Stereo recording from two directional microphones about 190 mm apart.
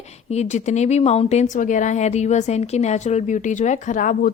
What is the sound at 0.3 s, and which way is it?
A woman's voice, 35° left (ahead or behind).